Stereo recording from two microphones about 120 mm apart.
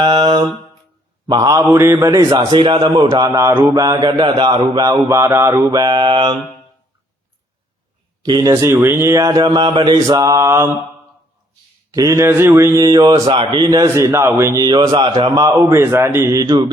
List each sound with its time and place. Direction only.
0.0 s mantra: 45° right (ahead or behind)
1.3 s a man's voice: 35° right (ahead or behind)
1.7 s mantra: 25° right (ahead or behind)
2.0 s a man's voice: 30° right (ahead or behind)
3.5 s mantra: 20° right (ahead or behind)
3.8 s mantra: 35° right (ahead or behind)
5.7 s mantra: 40° right (ahead or behind)
8.2 s a man's voice: 35° right (ahead or behind)
8.5 s mantra: 20° right (ahead or behind); by 9.9 s 45° right (ahead or behind)
9.9 s mantra: 30° right (ahead or behind)
11.9 s mantra: 25° right (ahead or behind)
13.2 s mantra: 50° right (ahead or behind)
13.8 s mantra: 25° right (ahead or behind)
15.7 s mantra: 20° right (ahead or behind)